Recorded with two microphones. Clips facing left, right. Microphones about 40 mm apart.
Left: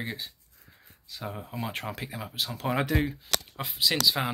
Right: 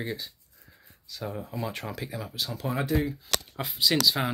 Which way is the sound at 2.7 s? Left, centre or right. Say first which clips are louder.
Even; left.